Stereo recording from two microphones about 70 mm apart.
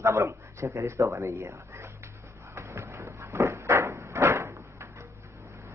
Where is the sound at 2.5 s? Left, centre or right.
Right.